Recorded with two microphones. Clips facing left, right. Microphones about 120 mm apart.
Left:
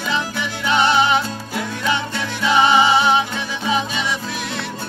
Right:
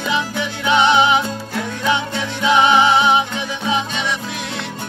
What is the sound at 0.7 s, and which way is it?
Music, 15° right (ahead or behind).